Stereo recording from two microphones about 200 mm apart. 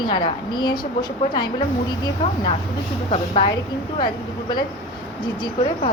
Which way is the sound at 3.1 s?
30° left (ahead or behind).